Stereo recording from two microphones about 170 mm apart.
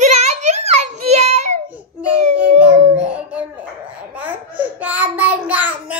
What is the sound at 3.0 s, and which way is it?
Music, 10° right (ahead or behind).